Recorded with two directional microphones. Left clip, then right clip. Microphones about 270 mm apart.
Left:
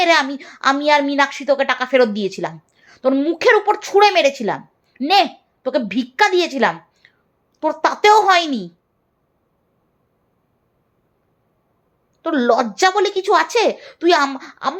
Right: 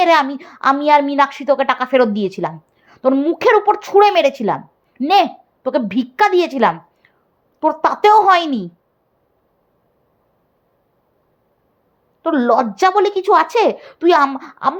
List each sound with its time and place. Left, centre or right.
0.0 s a woman's voice: right
12.2 s a woman's voice: right